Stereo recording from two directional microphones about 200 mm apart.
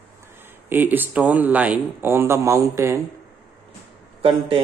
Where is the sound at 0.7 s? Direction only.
10° right (ahead or behind).